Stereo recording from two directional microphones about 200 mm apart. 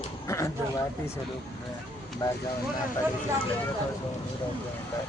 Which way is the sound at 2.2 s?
20° left (ahead or behind).